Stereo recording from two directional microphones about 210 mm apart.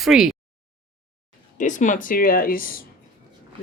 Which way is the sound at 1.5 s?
35° left (ahead or behind).